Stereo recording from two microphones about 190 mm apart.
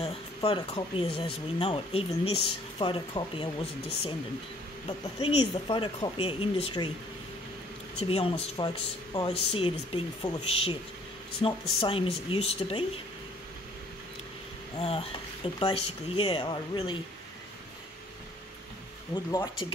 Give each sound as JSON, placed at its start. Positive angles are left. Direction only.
{"t": 0.0, "sound": "speech", "side_deg": 30}
{"t": 8.0, "sound": "speech", "side_deg": 30}
{"t": 14.8, "sound": "speech", "side_deg": 30}